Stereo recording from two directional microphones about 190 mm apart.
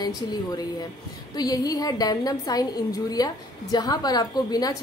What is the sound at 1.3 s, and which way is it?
A woman's voice, 20° left (ahead or behind).